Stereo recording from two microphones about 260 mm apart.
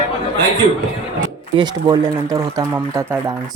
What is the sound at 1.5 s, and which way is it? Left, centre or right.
Speech, centre.